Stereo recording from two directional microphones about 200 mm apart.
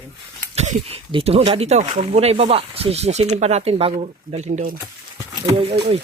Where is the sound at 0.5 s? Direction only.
35° right (ahead or behind).